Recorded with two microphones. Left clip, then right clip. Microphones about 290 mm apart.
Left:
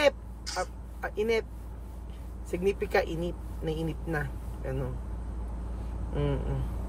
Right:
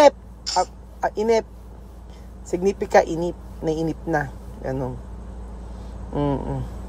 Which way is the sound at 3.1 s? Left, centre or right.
Right.